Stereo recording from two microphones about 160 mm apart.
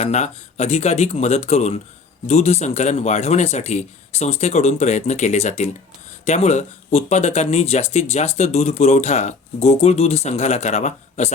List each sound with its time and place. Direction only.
0.0 s speech: 45° left (ahead or behind)